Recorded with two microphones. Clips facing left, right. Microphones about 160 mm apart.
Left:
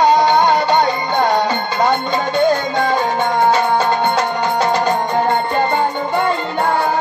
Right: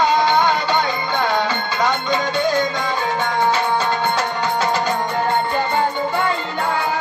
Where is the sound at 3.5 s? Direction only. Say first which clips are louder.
Left 5 dB; 55° left (ahead or behind).